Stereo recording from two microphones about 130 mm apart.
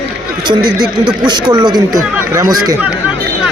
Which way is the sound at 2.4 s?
30° right (ahead or behind).